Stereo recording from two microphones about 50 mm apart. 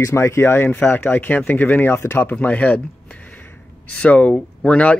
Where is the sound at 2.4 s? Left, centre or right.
Left.